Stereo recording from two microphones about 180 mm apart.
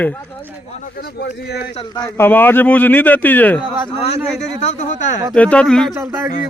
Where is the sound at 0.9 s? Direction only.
60° left (ahead or behind).